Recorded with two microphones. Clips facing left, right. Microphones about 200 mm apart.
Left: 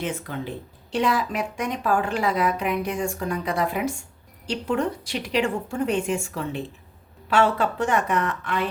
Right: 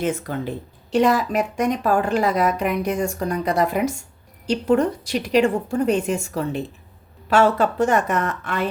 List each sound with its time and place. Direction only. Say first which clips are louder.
0.0 s a woman's voice: right 5 dB; 45° right (ahead or behind)